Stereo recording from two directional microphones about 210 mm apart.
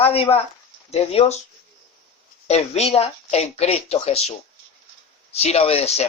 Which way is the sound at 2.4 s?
30° left (ahead or behind).